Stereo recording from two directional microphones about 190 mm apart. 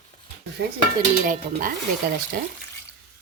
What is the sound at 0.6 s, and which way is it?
Dishes, 65° right (ahead or behind).